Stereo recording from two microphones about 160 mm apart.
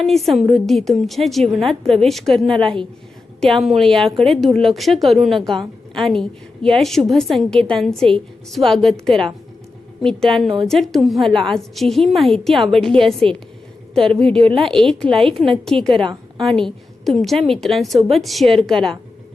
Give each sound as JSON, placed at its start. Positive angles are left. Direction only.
{"t": 0.0, "sound": "a woman's voice", "side_deg": 0}
{"t": 2.6, "sound": "a woman's voice", "side_deg": -30}
{"t": 3.4, "sound": "a woman's voice", "side_deg": 0}
{"t": 14.3, "sound": "a woman's voice", "side_deg": -35}
{"t": 14.6, "sound": "a woman's voice", "side_deg": 5}